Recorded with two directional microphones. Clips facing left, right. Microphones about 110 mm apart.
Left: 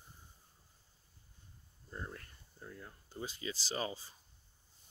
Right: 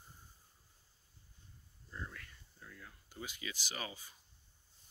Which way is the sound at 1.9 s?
35° left (ahead or behind).